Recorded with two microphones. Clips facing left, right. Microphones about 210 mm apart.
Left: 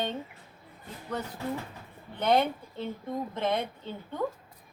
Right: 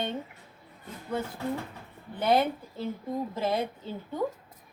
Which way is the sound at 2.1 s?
5° right (ahead or behind).